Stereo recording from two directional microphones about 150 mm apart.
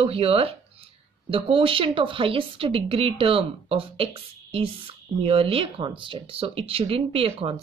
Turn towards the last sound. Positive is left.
turn(degrees=-40)  # may be behind; listen again after turning